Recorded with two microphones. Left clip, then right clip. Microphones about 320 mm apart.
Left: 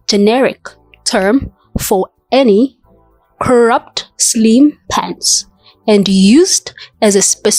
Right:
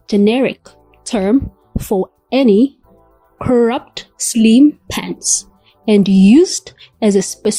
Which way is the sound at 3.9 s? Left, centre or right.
Centre.